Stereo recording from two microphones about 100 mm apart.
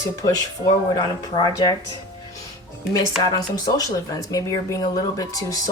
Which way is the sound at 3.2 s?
35° left (ahead or behind).